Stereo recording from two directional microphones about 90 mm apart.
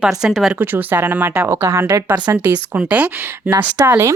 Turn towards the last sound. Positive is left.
turn(degrees=-20)  # may be behind; listen again after turning